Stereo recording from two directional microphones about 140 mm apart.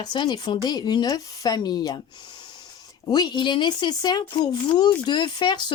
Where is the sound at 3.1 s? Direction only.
30° left (ahead or behind).